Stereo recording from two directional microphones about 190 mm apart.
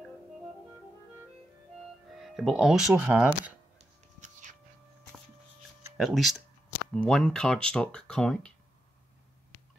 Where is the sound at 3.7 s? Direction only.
40° right (ahead or behind).